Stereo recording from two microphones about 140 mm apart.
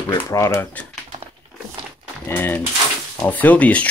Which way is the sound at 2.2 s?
15° left (ahead or behind).